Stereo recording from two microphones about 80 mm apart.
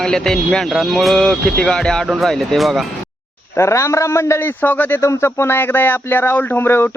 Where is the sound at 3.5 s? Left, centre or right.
Left.